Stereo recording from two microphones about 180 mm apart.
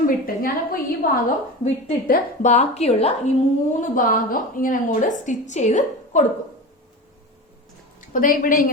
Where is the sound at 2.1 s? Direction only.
40° left (ahead or behind).